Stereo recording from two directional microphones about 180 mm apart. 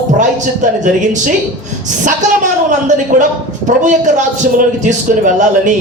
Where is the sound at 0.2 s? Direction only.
45° right (ahead or behind).